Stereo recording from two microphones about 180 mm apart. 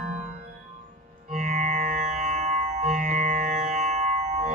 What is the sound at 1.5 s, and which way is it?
Music, 40° right (ahead or behind).